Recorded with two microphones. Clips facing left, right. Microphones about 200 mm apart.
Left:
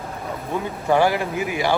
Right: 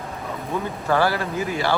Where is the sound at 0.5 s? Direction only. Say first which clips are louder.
Left 2 dB; 15° left (ahead or behind).